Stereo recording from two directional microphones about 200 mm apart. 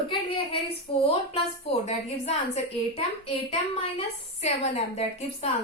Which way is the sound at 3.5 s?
30° left (ahead or behind).